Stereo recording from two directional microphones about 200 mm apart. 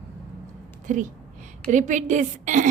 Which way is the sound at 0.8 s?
40° right (ahead or behind).